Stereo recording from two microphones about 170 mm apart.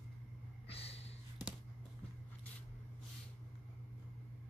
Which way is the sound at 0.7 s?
35° left (ahead or behind).